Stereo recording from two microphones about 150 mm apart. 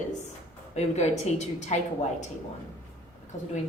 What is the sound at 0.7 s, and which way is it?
A woman's voice, 45° left (ahead or behind).